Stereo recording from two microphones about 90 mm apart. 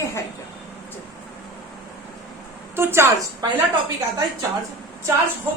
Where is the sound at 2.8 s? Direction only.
25° right (ahead or behind).